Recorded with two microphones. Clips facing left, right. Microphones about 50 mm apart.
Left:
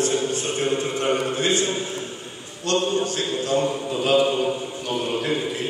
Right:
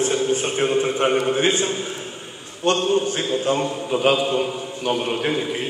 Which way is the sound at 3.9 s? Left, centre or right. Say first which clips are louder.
Right 11 dB; right.